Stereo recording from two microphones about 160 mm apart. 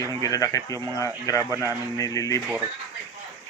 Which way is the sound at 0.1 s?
20° left (ahead or behind).